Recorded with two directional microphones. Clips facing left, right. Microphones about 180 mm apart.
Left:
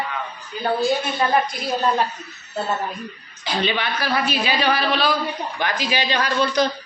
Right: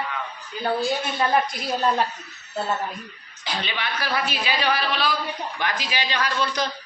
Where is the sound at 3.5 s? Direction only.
30° left (ahead or behind).